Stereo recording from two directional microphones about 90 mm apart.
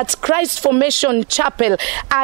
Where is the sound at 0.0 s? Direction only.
10° right (ahead or behind).